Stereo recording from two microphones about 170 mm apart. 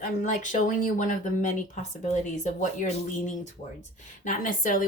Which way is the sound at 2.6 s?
45° left (ahead or behind).